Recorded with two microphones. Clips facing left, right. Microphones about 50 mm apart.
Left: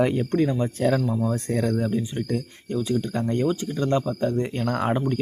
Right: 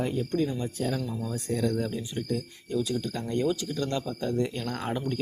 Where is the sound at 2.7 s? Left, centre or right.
Left.